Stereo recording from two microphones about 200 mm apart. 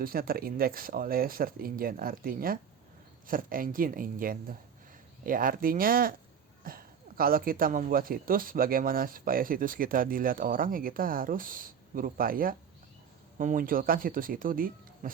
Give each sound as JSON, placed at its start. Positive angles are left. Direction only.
{"t": 0.0, "sound": "speech", "side_deg": -45}